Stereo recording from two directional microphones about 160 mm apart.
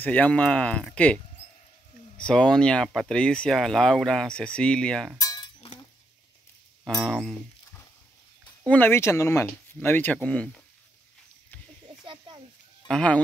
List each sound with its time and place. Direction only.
0.0 s speech: 10° left (ahead or behind)
5.6 s chink: 30° left (ahead or behind)
6.8 s speech: centre (ahead or behind)
8.6 s speech: 10° left (ahead or behind)
12.8 s speech: 5° left (ahead or behind)